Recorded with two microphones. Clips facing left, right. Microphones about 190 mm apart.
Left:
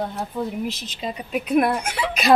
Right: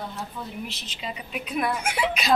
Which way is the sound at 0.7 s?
40° left (ahead or behind).